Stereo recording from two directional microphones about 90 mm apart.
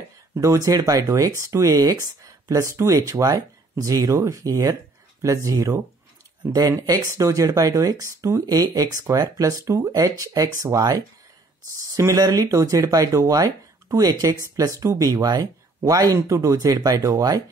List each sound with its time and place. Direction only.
0.4 s speech: 35° right (ahead or behind)
6.8 s speech: 45° right (ahead or behind)